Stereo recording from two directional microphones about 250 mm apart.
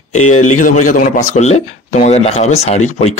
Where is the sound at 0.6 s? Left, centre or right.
Left.